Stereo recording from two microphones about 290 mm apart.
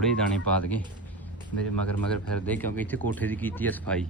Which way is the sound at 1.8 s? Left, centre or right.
Centre.